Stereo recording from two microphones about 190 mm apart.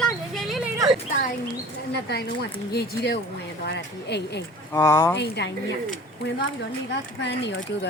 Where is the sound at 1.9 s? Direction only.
60° left (ahead or behind).